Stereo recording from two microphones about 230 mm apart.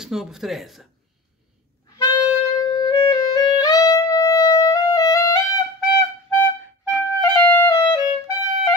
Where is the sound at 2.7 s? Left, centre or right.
Centre.